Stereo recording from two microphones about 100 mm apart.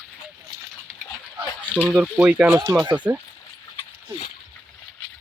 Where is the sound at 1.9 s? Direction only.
10° right (ahead or behind).